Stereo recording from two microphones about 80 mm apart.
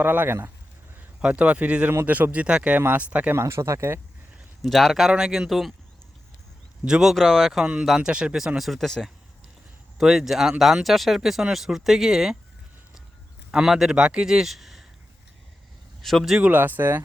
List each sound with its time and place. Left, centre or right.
0.0 s a man's voice: right
3.3 s speech: right
4.6 s speech: centre
6.8 s a man's voice: centre
7.2 s speech: centre
13.5 s a man's voice: centre
16.0 s speech: centre
16.4 s speech: right